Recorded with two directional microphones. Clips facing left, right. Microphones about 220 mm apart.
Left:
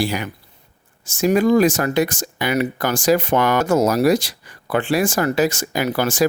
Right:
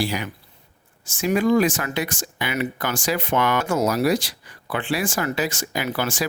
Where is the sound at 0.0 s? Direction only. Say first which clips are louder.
Left 3 dB; 50° left (ahead or behind).